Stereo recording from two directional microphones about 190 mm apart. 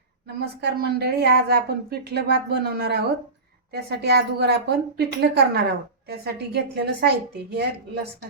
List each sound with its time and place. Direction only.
0.6 s a woman's voice: 55° right (ahead or behind)